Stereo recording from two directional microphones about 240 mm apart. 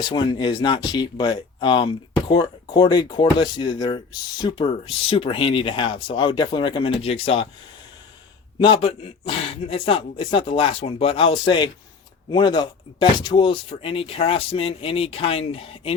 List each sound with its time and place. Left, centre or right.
0.0 s speech: centre
8.5 s speech: left